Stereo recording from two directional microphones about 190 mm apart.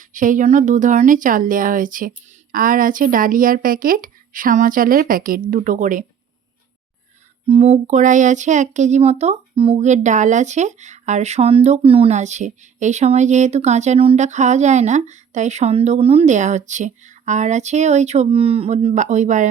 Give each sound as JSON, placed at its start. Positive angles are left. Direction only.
{"t": 0.0, "sound": "speech", "side_deg": -45}
{"t": 7.4, "sound": "speech", "side_deg": -30}